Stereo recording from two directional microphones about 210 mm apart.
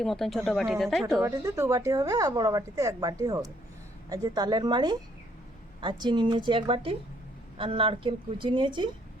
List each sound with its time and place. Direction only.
0.0 s speech: centre (ahead or behind)
1.2 s a woman's voice: 15° right (ahead or behind)